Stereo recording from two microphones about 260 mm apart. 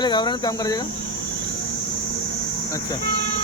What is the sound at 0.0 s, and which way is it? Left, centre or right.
Speech, centre.